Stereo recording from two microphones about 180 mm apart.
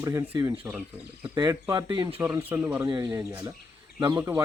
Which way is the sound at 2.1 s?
10° right (ahead or behind).